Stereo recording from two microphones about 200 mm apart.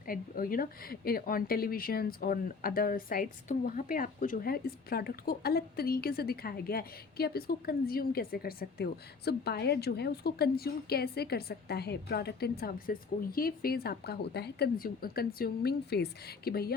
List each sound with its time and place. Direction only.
0.1 s a woman's voice: 45° left (ahead or behind)